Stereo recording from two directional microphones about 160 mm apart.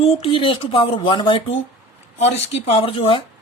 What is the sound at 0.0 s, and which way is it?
Speech, 35° left (ahead or behind).